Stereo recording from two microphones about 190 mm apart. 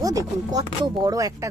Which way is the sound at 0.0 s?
20° right (ahead or behind).